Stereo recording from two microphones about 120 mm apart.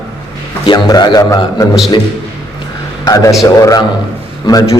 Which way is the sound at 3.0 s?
30° left (ahead or behind).